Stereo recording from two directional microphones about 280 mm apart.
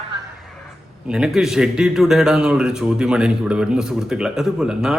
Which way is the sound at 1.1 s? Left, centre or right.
Centre.